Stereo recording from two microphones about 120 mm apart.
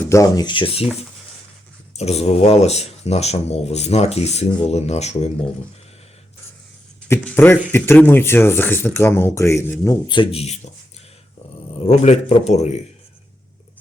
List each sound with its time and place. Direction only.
0.1 s speech: 25° left (ahead or behind)
0.4 s speech: 45° left (ahead or behind)
2.0 s speech: 65° left (ahead or behind)
7.3 s speech: 15° left (ahead or behind)
10.3 s speech: 60° left (ahead or behind)
11.9 s speech: 65° left (ahead or behind)